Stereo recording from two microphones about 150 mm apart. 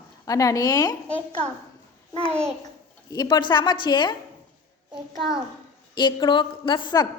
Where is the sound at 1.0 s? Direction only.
40° right (ahead or behind).